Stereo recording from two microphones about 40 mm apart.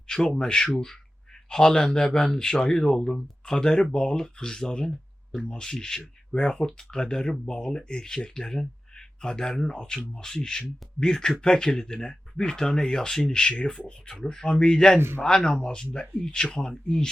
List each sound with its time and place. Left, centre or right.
0.1 s speech: centre
14.9 s speech: right
15.2 s speech: centre